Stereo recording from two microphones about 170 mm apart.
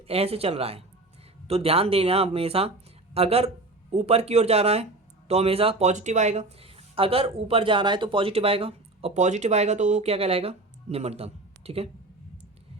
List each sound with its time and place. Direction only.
0.1 s a man's voice: 35° right (ahead or behind)